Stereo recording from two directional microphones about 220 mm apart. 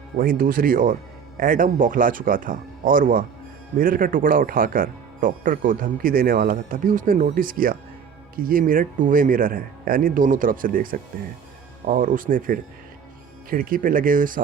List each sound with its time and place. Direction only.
0.2 s speech: 40° right (ahead or behind)